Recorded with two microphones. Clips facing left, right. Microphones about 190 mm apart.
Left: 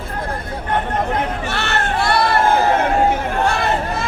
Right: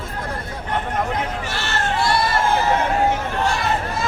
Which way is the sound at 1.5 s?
60° left (ahead or behind).